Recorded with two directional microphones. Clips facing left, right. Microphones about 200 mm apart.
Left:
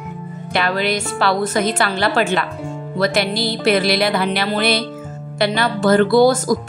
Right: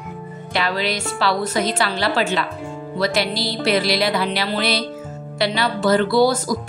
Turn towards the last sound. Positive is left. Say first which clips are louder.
# left 4 dB
turn(degrees=50)  # may be behind; listen again after turning